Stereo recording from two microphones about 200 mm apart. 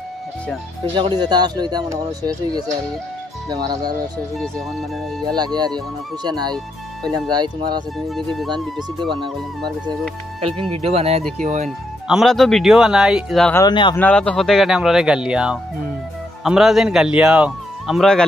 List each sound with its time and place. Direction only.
0.9 s speech: 20° right (ahead or behind)
4.4 s speech: centre (ahead or behind)
5.2 s speech: 20° right (ahead or behind)
8.1 s speech: centre (ahead or behind)
10.4 s speech: 30° right (ahead or behind)
12.1 s speech: centre (ahead or behind)
13.6 s speech: 20° left (ahead or behind)
13.9 s speech: 5° left (ahead or behind)